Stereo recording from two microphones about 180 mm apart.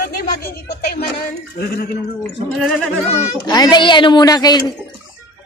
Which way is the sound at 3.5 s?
25° left (ahead or behind).